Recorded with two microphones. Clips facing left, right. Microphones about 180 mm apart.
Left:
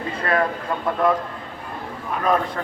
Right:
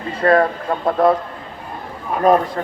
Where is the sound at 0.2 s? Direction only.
35° right (ahead or behind).